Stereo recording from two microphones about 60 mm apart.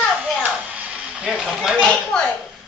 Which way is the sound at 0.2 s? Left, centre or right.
Right.